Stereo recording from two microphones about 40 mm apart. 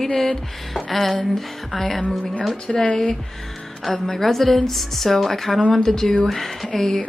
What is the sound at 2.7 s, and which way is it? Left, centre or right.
Speech, left.